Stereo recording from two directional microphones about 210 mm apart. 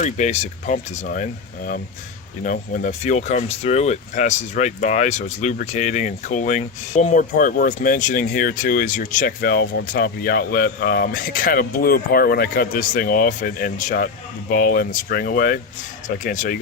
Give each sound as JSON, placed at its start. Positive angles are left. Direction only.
{"t": 0.0, "sound": "speech", "side_deg": 35}